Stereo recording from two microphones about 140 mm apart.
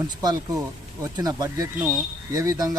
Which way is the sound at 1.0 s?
25° right (ahead or behind).